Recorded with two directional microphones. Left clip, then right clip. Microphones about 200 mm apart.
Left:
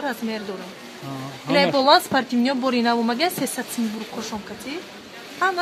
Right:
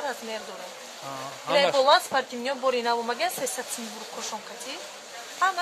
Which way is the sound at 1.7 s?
50° left (ahead or behind).